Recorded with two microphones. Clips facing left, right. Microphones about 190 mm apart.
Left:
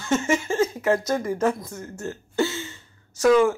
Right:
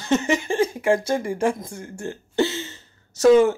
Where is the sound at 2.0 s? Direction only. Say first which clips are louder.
Right 2 dB; 20° right (ahead or behind).